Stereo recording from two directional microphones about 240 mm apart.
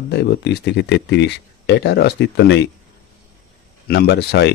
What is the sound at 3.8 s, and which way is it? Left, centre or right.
Speech, left.